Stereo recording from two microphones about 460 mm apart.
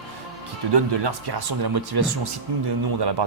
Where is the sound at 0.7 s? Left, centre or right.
Right.